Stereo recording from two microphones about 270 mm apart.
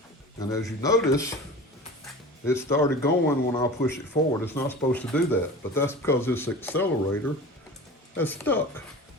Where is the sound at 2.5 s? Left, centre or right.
Centre.